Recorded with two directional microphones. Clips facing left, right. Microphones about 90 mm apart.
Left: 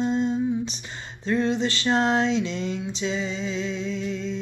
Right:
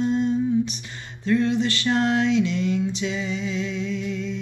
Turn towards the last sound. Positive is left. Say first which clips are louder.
# right 1 dB
turn(degrees=30)  # may be behind; listen again after turning